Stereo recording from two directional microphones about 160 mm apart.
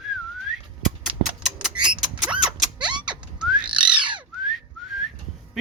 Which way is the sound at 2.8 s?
30° right (ahead or behind).